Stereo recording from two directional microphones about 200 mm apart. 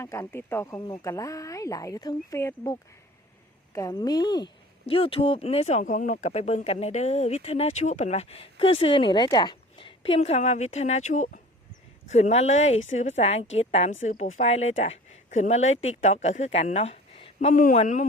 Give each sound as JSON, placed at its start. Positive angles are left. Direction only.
{"t": 0.0, "sound": "speech", "side_deg": 15}
{"t": 3.8, "sound": "speech", "side_deg": 20}
{"t": 17.5, "sound": "speech", "side_deg": 40}